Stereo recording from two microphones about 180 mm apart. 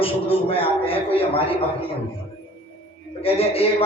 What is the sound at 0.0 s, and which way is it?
A man's voice, 30° left (ahead or behind).